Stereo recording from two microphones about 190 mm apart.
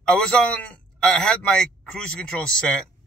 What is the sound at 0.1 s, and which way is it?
Speech, 5° left (ahead or behind).